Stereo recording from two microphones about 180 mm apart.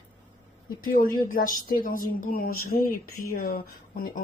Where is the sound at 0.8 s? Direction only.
50° left (ahead or behind).